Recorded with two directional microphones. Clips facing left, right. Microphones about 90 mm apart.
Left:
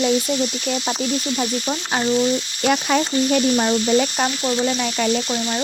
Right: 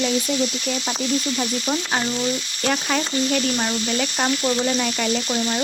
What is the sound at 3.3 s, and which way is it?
Speech, 25° left (ahead or behind).